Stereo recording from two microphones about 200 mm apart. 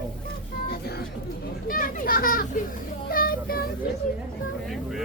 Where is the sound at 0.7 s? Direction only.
50° left (ahead or behind).